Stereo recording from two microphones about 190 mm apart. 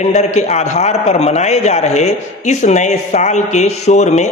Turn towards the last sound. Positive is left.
turn(degrees=35)  # may be behind; listen again after turning